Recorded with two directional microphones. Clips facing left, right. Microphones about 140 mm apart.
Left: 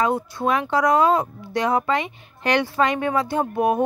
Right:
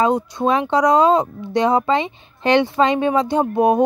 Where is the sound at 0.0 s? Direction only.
20° right (ahead or behind).